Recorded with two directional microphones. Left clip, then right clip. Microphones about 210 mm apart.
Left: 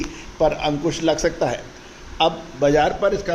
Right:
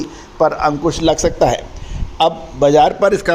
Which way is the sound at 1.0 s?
40° right (ahead or behind).